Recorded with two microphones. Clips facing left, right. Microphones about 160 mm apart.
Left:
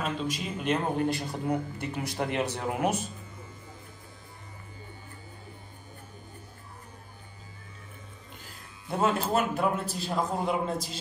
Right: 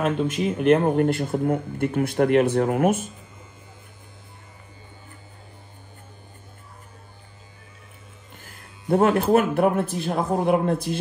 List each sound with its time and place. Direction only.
0.0 s speech: 60° right (ahead or behind)
8.4 s speech: 55° right (ahead or behind)